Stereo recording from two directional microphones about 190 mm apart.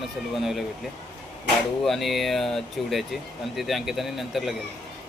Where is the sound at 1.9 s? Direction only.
Centre (ahead or behind).